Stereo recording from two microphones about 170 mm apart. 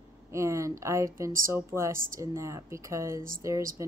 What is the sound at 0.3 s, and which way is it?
A woman's voice, 15° right (ahead or behind).